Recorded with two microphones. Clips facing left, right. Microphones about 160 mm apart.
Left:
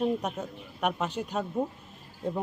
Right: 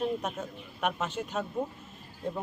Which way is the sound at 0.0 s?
10° left (ahead or behind).